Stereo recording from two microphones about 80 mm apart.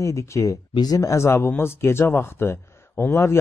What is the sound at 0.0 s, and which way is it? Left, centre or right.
Speech, left.